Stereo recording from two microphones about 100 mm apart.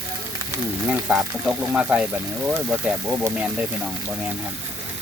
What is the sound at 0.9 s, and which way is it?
Speech, 10° right (ahead or behind).